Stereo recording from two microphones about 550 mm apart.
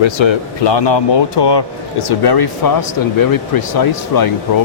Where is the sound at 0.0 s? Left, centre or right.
Left.